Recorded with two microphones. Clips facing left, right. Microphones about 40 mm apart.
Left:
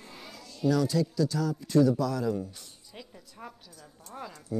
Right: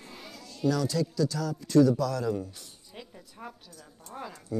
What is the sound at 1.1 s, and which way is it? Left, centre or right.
Speech, centre.